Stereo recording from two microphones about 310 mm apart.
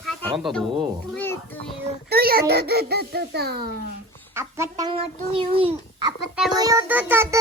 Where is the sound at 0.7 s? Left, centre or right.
Centre.